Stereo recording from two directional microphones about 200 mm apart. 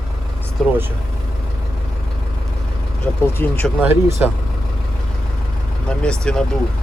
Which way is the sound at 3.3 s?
10° left (ahead or behind).